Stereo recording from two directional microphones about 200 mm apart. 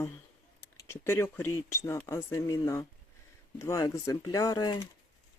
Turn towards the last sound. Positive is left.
turn(degrees=20)  # may be behind; listen again after turning